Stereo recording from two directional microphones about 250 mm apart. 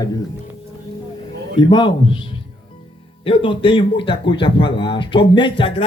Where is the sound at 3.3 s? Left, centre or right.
Left.